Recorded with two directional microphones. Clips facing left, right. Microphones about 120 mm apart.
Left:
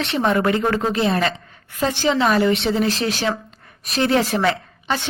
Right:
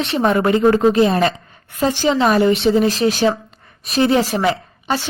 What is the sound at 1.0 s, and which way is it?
Speech, 35° right (ahead or behind).